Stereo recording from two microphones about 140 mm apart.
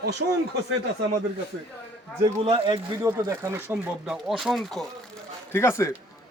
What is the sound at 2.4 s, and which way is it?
Speech, 40° right (ahead or behind).